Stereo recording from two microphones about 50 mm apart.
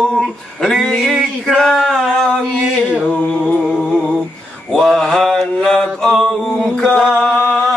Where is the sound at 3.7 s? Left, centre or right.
Centre.